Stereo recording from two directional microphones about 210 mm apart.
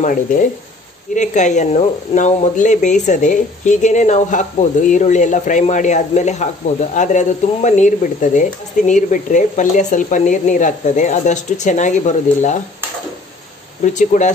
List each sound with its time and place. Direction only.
0.0 s speech: 40° left (ahead or behind)
13.9 s speech: 35° left (ahead or behind)